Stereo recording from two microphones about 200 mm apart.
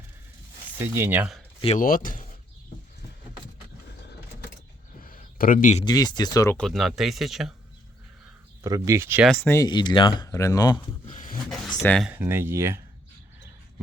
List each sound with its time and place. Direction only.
0.8 s speech: 10° right (ahead or behind)
1.8 s speech: 45° left (ahead or behind)
5.0 s a sound: 45° left (ahead or behind)
5.8 s speech: 20° left (ahead or behind)
6.6 s speech: centre (ahead or behind)
8.6 s speech: 15° right (ahead or behind)
9.2 s speech: centre (ahead or behind)
9.5 s speech: 20° left (ahead or behind)
11.0 s a sound: 35° left (ahead or behind)
11.4 s a sound: centre (ahead or behind)
11.8 s speech: centre (ahead or behind)
12.1 s speech: 10° right (ahead or behind)